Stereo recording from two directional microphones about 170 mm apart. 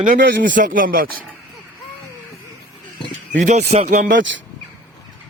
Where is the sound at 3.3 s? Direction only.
45° right (ahead or behind).